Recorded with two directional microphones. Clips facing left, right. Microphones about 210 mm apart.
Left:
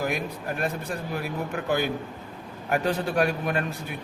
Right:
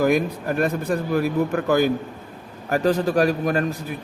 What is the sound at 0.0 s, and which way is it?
A man's voice, 45° right (ahead or behind).